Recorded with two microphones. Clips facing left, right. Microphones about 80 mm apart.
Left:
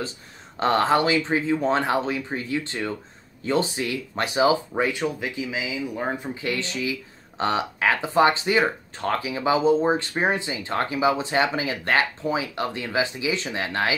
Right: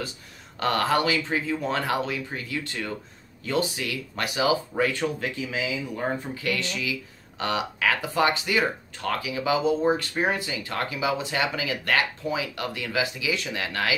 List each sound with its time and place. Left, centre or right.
0.6 s speech: left